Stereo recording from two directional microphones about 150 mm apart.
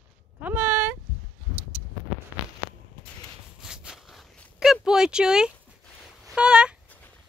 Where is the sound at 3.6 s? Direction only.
5° right (ahead or behind).